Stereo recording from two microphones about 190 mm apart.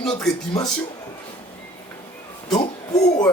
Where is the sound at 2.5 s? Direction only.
20° left (ahead or behind).